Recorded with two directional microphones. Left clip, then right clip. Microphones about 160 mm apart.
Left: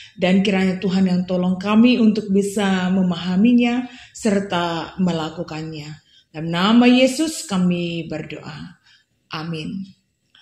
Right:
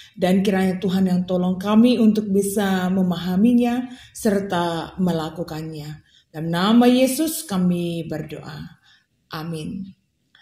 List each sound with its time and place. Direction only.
0.4 s a woman's voice: 35° right (ahead or behind)